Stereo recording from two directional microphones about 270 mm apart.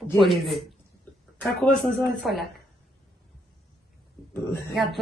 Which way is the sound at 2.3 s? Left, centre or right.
Centre.